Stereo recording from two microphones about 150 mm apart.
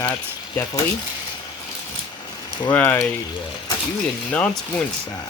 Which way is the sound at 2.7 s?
15° left (ahead or behind).